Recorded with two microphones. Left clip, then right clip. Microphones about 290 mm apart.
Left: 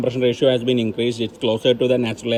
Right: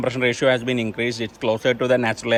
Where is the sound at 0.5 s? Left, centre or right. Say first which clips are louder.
Left 3 dB; centre.